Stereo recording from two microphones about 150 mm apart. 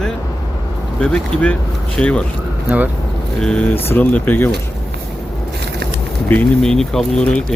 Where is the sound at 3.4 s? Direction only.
5° left (ahead or behind).